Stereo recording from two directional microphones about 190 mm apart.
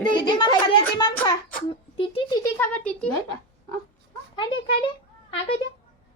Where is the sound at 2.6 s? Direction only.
5° left (ahead or behind).